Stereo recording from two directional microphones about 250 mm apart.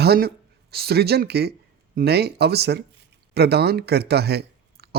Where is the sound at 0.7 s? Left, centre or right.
Right.